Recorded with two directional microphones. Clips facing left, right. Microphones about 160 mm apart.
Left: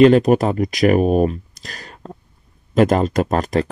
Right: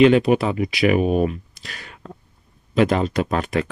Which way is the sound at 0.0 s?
45° left (ahead or behind).